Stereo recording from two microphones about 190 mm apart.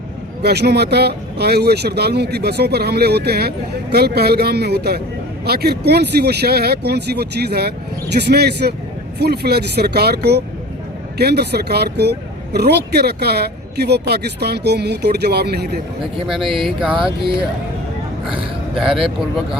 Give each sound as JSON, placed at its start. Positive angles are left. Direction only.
{"t": 0.4, "sound": "speech", "side_deg": -60}
{"t": 16.2, "sound": "speech", "side_deg": 0}
{"t": 16.9, "sound": "speech", "side_deg": -25}